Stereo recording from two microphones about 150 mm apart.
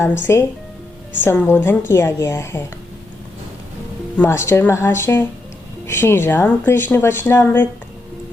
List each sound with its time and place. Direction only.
0.2 s speech: 15° left (ahead or behind)
4.2 s speech: 15° left (ahead or behind)